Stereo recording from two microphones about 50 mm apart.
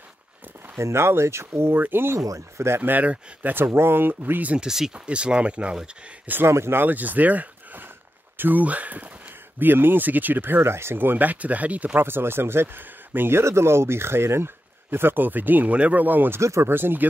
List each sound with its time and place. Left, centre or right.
0.7 s speech: right
2.1 s speech: right
2.8 s speech: right
3.5 s speech: right
4.6 s speech: centre
4.9 s speech: right
6.4 s speech: right
6.8 s speech: right
9.6 s speech: right
10.6 s speech: right
12.0 s speech: right
13.4 s speech: right
16.3 s speech: right
16.6 s speech: right